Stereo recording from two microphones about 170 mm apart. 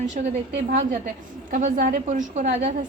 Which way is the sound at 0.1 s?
45° right (ahead or behind).